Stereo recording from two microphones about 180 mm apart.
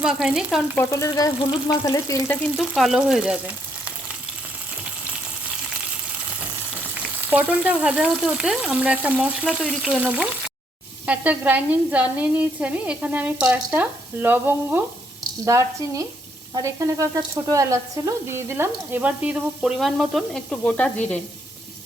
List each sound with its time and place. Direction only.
0.0 s speech: 5° right (ahead or behind)
0.8 s frying: 15° left (ahead or behind)
2.7 s speech: 5° right (ahead or behind)
7.3 s speech: 10° right (ahead or behind); by 21.2 s 5° left (ahead or behind)